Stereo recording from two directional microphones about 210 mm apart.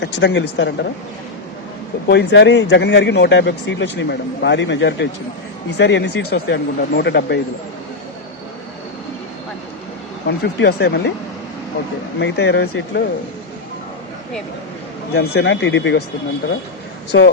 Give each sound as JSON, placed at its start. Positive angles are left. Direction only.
{"t": 0.0, "sound": "speech", "side_deg": 55}
{"t": 2.0, "sound": "speech", "side_deg": 55}
{"t": 10.2, "sound": "speech", "side_deg": 55}
{"t": 12.2, "sound": "speech", "side_deg": 55}
{"t": 15.1, "sound": "speech", "side_deg": 50}
{"t": 17.1, "sound": "speech", "side_deg": 55}